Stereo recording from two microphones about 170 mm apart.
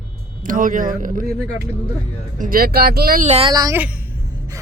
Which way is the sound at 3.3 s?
30° right (ahead or behind).